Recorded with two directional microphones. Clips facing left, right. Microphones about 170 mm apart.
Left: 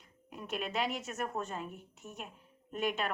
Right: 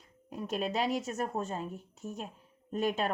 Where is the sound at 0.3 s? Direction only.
35° right (ahead or behind).